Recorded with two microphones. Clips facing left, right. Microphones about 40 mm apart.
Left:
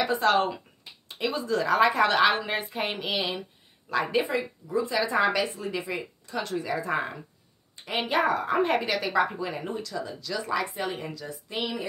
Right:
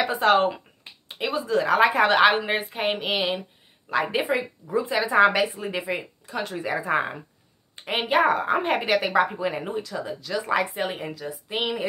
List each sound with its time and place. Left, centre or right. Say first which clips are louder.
0.0 s a woman's voice: right 3 dB; right
6.2 s a woman's voice: even; centre
9.7 s a woman's voice: right 3 dB; centre
11.4 s speech: right 4 dB; right